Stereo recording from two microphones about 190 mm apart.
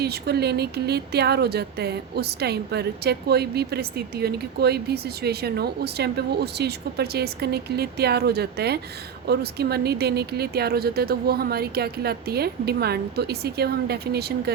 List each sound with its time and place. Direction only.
0.0 s speech: 60° right (ahead or behind)